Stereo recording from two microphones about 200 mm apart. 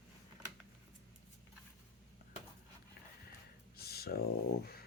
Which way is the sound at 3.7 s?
50° left (ahead or behind).